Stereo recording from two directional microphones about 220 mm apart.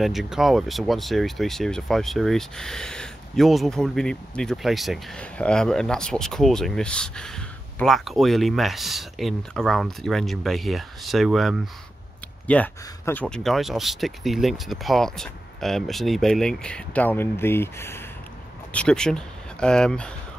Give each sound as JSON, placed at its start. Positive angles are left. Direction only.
{"t": 0.0, "sound": "speech", "side_deg": 0}